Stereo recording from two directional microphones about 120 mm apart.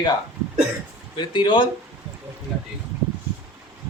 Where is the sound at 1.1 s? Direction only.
40° left (ahead or behind).